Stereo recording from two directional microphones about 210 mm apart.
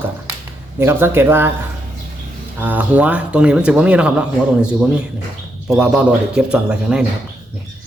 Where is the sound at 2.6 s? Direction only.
10° right (ahead or behind).